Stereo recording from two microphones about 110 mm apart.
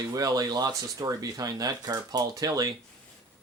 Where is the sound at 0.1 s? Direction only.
35° right (ahead or behind).